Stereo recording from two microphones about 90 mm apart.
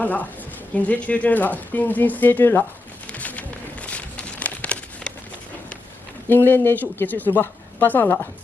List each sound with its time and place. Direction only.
0.0 s a woman's voice: 20° left (ahead or behind)
3.1 s a sound: 15° left (ahead or behind)
6.2 s speech: 25° left (ahead or behind)